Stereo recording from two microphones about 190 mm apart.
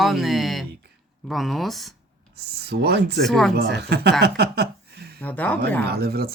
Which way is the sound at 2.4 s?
60° right (ahead or behind).